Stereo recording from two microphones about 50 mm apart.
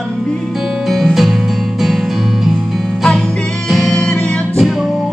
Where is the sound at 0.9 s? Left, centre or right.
Centre.